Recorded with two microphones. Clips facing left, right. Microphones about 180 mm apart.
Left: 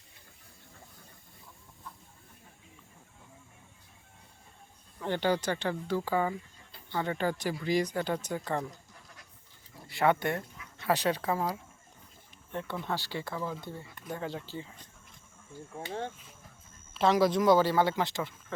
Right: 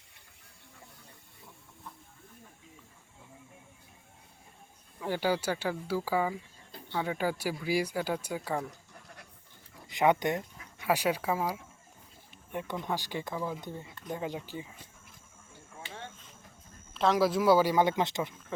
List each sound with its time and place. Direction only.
4.9 s speech: 5° right (ahead or behind)
9.8 s speech: 15° right (ahead or behind)
15.8 s vehicle: 40° left (ahead or behind)
16.9 s speech: centre (ahead or behind); by 18.3 s 20° right (ahead or behind)